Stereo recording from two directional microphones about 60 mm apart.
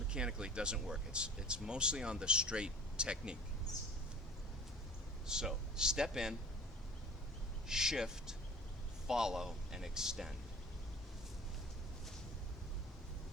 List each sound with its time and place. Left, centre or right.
0.1 s speech: centre
5.2 s speech: centre
7.7 s speech: centre